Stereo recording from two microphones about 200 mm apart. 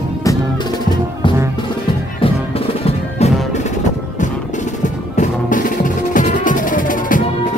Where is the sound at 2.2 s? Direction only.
30° left (ahead or behind).